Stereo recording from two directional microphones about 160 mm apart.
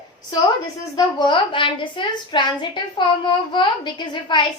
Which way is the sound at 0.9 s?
30° left (ahead or behind).